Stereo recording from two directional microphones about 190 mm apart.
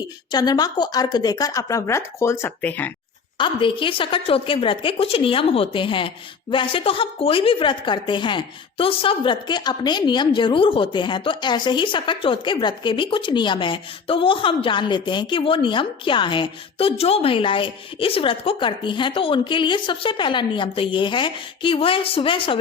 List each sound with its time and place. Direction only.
0.3 s a woman's voice: 20° left (ahead or behind)
3.3 s a woman's voice: 25° left (ahead or behind)